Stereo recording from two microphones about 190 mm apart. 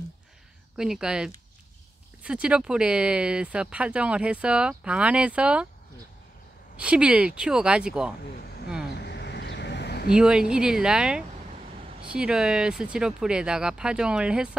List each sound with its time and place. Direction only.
0.7 s speech: 5° right (ahead or behind)
6.8 s speech: 5° right (ahead or behind)
8.9 s a sound: 60° left (ahead or behind)
10.0 s speech: 5° right (ahead or behind)